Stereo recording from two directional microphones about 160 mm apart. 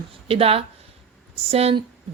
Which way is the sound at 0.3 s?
35° right (ahead or behind).